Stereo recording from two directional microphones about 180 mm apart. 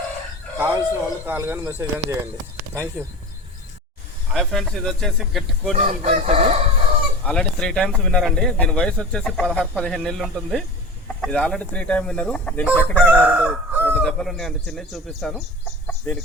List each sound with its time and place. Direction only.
0.6 s speech: 10° right (ahead or behind)
4.3 s a man's voice: centre (ahead or behind)
5.7 s chicken: 40° right (ahead or behind)
7.3 s a man's voice: 5° left (ahead or behind)
13.1 s chicken: 10° right (ahead or behind)
13.9 s a man's voice: 5° left (ahead or behind)